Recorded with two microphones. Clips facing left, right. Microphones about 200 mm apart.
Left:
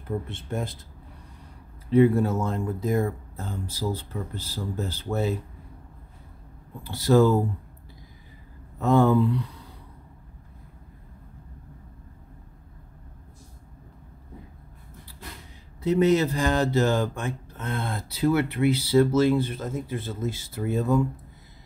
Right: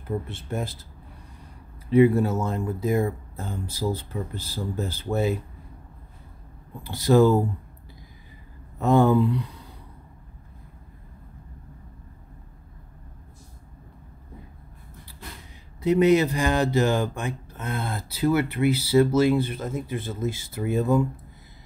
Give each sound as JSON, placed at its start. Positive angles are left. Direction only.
{"t": 0.1, "sound": "speech", "side_deg": -5}
{"t": 1.9, "sound": "speech", "side_deg": -5}
{"t": 6.8, "sound": "speech", "side_deg": -15}
{"t": 8.7, "sound": "speech", "side_deg": -15}
{"t": 15.8, "sound": "speech", "side_deg": -15}